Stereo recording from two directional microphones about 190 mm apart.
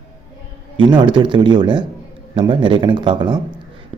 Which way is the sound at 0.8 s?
25° right (ahead or behind).